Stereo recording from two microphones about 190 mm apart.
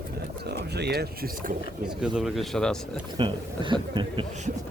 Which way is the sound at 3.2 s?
25° right (ahead or behind).